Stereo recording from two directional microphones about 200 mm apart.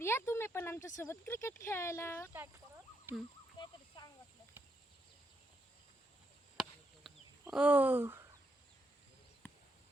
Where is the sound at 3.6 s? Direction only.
20° left (ahead or behind).